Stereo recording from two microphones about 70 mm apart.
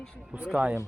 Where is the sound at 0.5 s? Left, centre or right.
Centre.